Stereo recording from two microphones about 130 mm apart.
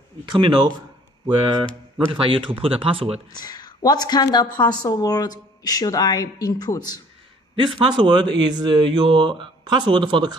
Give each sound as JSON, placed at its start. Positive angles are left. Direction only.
{"t": 0.3, "sound": "speech", "side_deg": -35}
{"t": 3.3, "sound": "a woman's voice", "side_deg": 30}
{"t": 7.5, "sound": "speech", "side_deg": -40}